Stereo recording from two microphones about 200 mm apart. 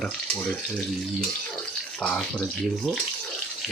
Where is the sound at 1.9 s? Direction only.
5° left (ahead or behind).